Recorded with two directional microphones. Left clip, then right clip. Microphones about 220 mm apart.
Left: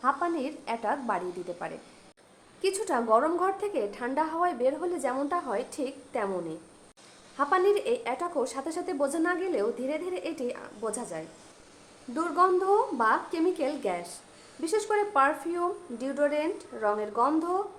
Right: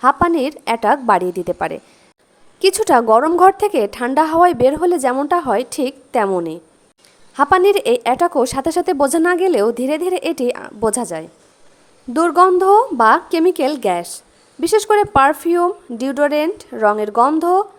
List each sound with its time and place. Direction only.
0.0 s a woman's voice: 45° right (ahead or behind)